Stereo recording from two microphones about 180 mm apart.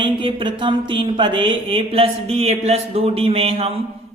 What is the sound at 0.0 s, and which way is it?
Speech, 25° right (ahead or behind).